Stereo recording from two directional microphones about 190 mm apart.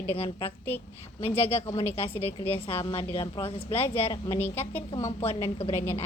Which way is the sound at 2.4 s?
30° left (ahead or behind).